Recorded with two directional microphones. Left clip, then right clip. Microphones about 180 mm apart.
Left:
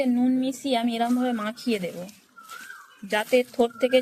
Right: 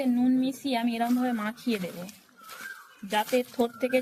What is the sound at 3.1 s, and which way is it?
Speech, 20° left (ahead or behind).